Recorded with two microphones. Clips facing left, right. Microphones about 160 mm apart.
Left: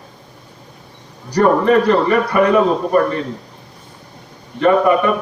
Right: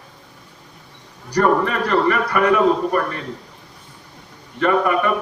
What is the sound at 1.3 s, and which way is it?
A man's voice, 20° left (ahead or behind).